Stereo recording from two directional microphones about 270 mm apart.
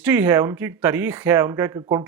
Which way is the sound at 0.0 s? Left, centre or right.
Centre.